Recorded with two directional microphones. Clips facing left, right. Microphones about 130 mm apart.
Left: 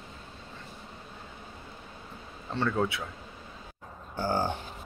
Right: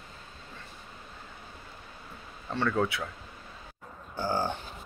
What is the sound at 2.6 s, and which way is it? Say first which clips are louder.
Speech: even; 25° left (ahead or behind).